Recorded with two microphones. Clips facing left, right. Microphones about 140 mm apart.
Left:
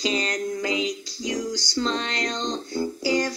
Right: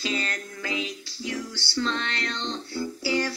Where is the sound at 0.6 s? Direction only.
15° left (ahead or behind).